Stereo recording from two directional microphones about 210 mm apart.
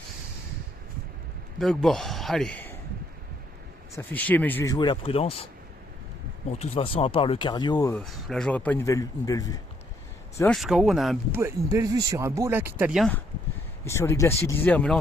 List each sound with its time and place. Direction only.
1.5 s a man's voice: centre (ahead or behind)
3.9 s speech: 10° left (ahead or behind); by 5.5 s 30° left (ahead or behind)
6.6 s speech: 30° left (ahead or behind)
7.9 s speech: 5° left (ahead or behind)
10.3 s speech: 5° left (ahead or behind)
11.3 s speech: 10° right (ahead or behind); by 14.9 s 5° left (ahead or behind)